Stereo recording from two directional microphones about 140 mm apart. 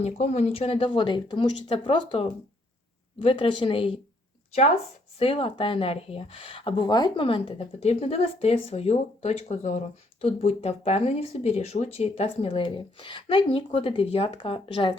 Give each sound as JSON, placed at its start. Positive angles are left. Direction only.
{"t": 0.0, "sound": "speech", "side_deg": 50}
{"t": 5.2, "sound": "speech", "side_deg": 40}